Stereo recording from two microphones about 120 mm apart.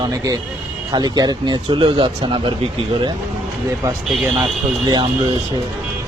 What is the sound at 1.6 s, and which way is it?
Speech, 45° right (ahead or behind).